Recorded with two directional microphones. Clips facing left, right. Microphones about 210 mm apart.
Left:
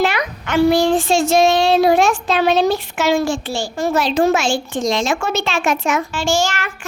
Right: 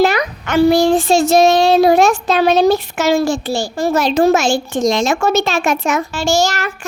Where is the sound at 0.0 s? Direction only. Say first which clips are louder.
Right 5 dB; 40° right (ahead or behind).